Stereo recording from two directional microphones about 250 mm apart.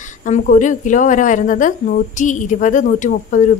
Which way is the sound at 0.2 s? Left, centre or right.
Left.